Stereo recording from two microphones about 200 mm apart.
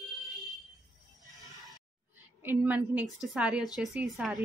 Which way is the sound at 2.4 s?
10° right (ahead or behind).